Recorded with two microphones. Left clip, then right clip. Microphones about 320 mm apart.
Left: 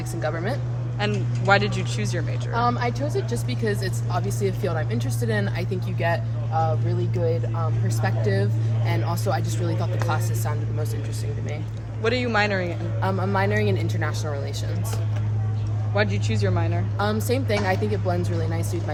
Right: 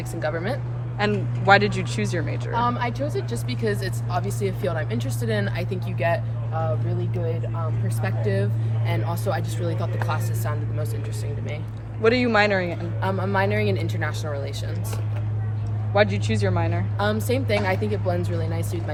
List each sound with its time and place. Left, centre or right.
0.2 s speech: centre
0.9 s speech: right
2.5 s speech: centre
8.0 s speech: centre
12.0 s speech: right
13.0 s speech: centre
16.0 s speech: right
17.2 s speech: centre